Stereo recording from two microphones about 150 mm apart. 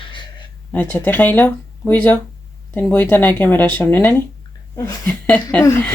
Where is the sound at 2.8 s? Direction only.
10° left (ahead or behind).